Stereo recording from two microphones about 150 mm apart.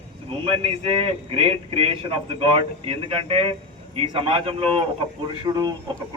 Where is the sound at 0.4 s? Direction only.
40° right (ahead or behind).